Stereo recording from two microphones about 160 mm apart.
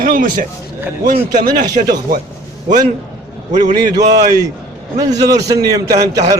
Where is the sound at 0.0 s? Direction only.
60° right (ahead or behind).